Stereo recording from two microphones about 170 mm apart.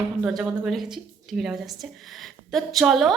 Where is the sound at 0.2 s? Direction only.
Centre (ahead or behind).